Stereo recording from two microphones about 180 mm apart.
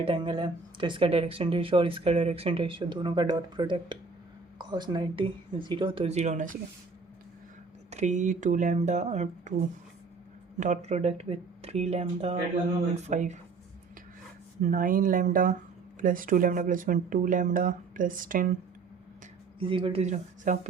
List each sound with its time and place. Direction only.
0.0 s speech: 30° right (ahead or behind); by 6.6 s 45° right (ahead or behind)
7.9 s speech: 40° right (ahead or behind)
10.6 s speech: 40° right (ahead or behind)
14.6 s speech: 50° right (ahead or behind)
19.5 s speech: 30° right (ahead or behind)